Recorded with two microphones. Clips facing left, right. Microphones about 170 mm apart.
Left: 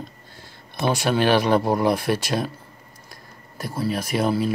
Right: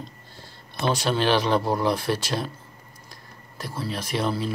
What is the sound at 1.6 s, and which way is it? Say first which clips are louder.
Speech: left 3 dB; 15° left (ahead or behind).